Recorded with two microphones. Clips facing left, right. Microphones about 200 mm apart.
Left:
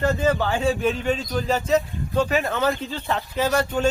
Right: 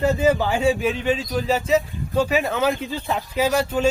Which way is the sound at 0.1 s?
10° right (ahead or behind).